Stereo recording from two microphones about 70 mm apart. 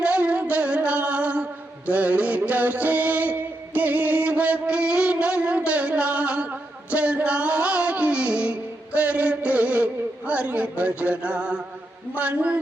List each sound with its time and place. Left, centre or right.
0.0 s music: centre
12.1 s a man's voice: right